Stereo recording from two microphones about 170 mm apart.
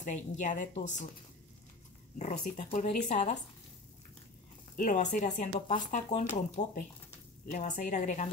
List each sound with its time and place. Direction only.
0.0 s speech: 45° left (ahead or behind)
2.1 s speech: 45° left (ahead or behind)
4.7 s speech: 50° left (ahead or behind)